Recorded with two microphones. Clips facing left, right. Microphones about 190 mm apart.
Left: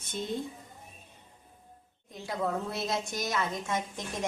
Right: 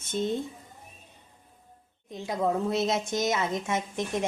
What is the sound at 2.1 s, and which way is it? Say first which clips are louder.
A woman's voice: right 5 dB; 20° right (ahead or behind).